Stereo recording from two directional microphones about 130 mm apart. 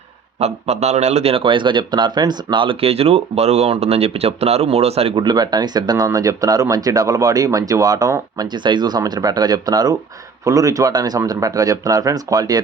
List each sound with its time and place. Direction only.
0.3 s a man's voice: 55° right (ahead or behind)
5.2 s speech: 35° right (ahead or behind)